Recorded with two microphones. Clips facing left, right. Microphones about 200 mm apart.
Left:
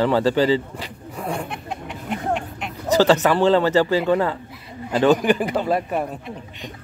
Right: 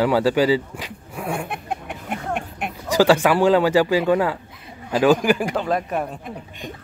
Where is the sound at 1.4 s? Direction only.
55° right (ahead or behind).